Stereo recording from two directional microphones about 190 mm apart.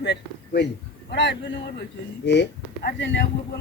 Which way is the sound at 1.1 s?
65° left (ahead or behind).